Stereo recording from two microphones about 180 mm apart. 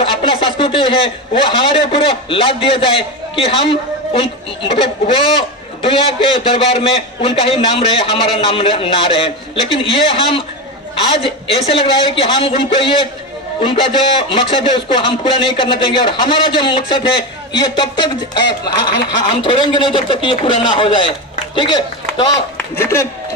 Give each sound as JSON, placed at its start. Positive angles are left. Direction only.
{"t": 0.0, "sound": "a man's voice", "side_deg": 30}